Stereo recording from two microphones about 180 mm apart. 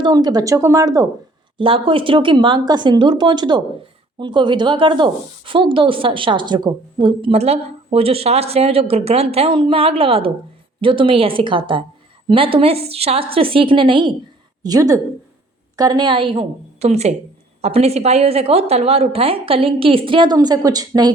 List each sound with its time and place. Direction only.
0.0 s a woman's voice: 20° right (ahead or behind)